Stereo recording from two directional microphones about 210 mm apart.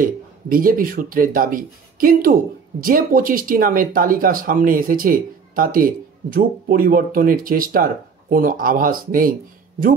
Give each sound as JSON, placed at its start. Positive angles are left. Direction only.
{"t": 0.0, "sound": "speech", "side_deg": -40}